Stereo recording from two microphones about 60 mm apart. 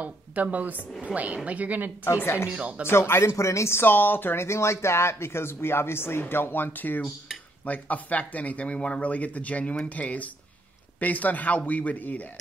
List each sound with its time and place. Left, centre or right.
0.0 s a woman's voice: right
2.2 s speech: left
2.5 s a woman's voice: right
2.9 s speech: left
3.3 s speech: left